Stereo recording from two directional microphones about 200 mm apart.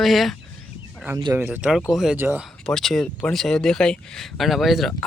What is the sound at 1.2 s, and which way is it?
Speech, 15° right (ahead or behind).